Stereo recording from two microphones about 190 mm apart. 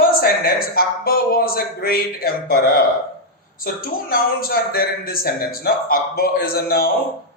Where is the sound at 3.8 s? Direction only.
50° left (ahead or behind).